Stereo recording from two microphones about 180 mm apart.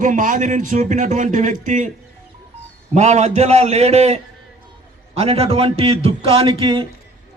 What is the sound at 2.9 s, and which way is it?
A man's voice, 40° right (ahead or behind).